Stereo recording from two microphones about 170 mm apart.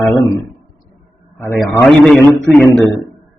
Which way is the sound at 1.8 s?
5° left (ahead or behind).